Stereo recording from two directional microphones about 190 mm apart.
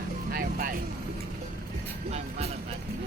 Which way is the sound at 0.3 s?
50° right (ahead or behind).